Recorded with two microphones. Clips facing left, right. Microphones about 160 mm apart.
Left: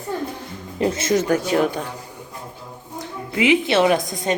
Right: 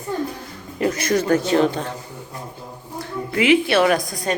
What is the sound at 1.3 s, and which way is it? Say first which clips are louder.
Speech: right 2 dB; 10° left (ahead or behind).